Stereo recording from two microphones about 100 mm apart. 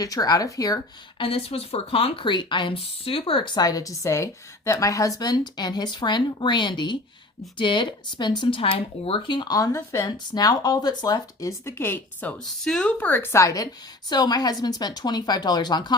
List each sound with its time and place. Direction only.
0.0 s speech: 35° left (ahead or behind)
1.2 s speech: 70° left (ahead or behind); by 13.7 s 30° left (ahead or behind)
14.1 s speech: 45° left (ahead or behind)